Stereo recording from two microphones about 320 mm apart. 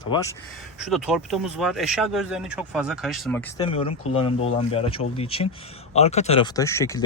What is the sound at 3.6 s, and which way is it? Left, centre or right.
Speech, centre.